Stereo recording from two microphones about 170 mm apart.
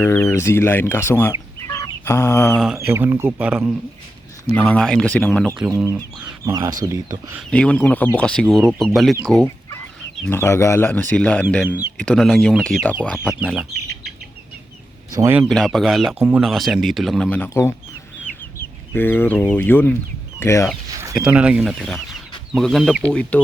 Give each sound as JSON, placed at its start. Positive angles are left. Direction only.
{"t": 0.0, "sound": "speech", "side_deg": 10}
{"t": 1.6, "sound": "chicken", "side_deg": 15}
{"t": 2.7, "sound": "speech", "side_deg": -15}
{"t": 4.5, "sound": "speech", "side_deg": 5}
{"t": 5.6, "sound": "speech", "side_deg": -15}
{"t": 7.5, "sound": "speech", "side_deg": 5}
{"t": 10.2, "sound": "speech", "side_deg": 15}
{"t": 13.2, "sound": "speech", "side_deg": -5}
{"t": 13.7, "sound": "chicken", "side_deg": -70}
{"t": 15.1, "sound": "speech", "side_deg": -15}
{"t": 15.4, "sound": "speech", "side_deg": 0}
{"t": 18.9, "sound": "speech", "side_deg": 10}
{"t": 21.2, "sound": "speech", "side_deg": -5}